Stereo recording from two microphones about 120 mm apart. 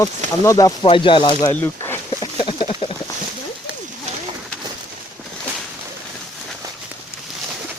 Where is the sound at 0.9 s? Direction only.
45° left (ahead or behind).